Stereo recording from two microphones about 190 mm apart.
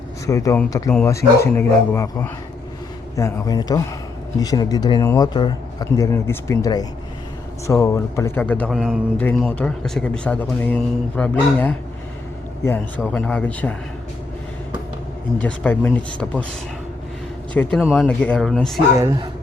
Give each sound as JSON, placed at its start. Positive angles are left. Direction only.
{"t": 0.3, "sound": "a man's voice", "side_deg": 15}
{"t": 13.0, "sound": "a man's voice", "side_deg": 5}
{"t": 15.4, "sound": "a man's voice", "side_deg": 5}
{"t": 17.5, "sound": "a man's voice", "side_deg": 5}
{"t": 17.8, "sound": "speech", "side_deg": -5}
{"t": 18.9, "sound": "speech", "side_deg": -15}